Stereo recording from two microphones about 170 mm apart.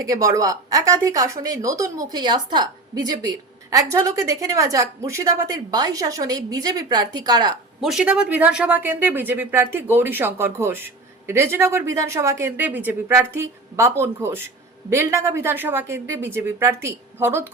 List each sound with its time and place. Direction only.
0.0 s a woman's voice: 20° right (ahead or behind)
7.8 s speech: centre (ahead or behind)